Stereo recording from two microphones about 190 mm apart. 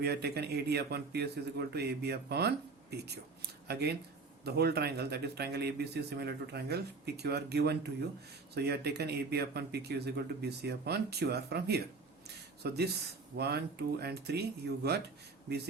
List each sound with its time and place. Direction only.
0.0 s a man's voice: 60° right (ahead or behind)
3.7 s a man's voice: 60° right (ahead or behind)